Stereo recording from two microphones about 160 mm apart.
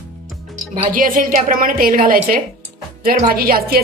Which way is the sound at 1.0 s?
60° right (ahead or behind).